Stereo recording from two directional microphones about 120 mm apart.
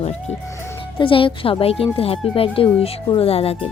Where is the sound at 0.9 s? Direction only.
45° left (ahead or behind).